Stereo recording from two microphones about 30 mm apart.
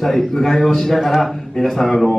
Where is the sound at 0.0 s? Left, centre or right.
Centre.